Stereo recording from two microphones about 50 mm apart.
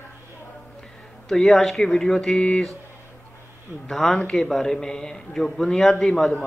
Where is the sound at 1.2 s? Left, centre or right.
Centre.